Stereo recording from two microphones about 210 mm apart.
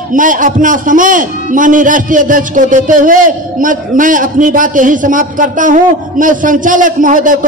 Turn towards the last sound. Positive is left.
turn(degrees=-40)  # may be behind; listen again after turning